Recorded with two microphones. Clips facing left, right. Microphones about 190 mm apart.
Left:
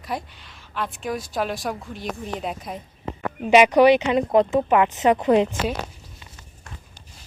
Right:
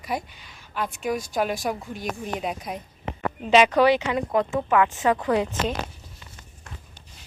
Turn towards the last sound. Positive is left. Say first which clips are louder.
# left 5 dB
turn(degrees=20)  # may be behind; listen again after turning